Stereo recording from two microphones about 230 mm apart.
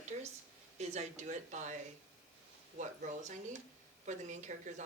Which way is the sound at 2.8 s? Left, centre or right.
Right.